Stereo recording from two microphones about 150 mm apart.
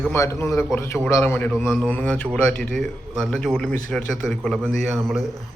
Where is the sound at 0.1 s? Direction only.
20° left (ahead or behind).